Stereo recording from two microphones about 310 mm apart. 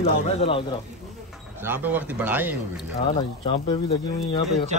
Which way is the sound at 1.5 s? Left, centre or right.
Centre.